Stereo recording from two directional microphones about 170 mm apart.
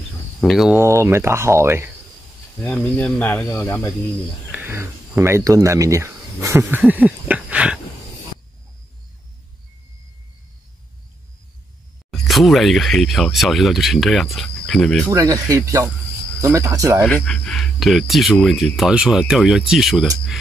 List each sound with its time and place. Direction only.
0.4 s speech: centre (ahead or behind)
0.8 s speech: 15° right (ahead or behind)
2.6 s speech: 5° left (ahead or behind)
4.5 s speech: 10° right (ahead or behind)
12.1 s speech: centre (ahead or behind)
15.0 s speech: 20° right (ahead or behind)
17.0 s speech: 5° left (ahead or behind)